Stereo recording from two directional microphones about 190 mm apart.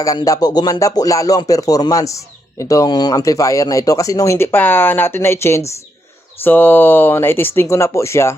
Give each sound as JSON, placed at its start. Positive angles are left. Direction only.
{"t": 0.0, "sound": "music", "side_deg": 20}